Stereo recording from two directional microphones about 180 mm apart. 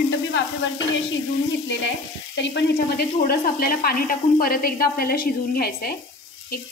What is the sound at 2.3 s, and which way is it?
Speech, 75° left (ahead or behind).